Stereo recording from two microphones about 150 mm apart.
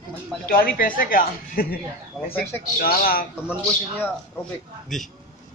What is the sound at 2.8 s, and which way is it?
Speech, 85° left.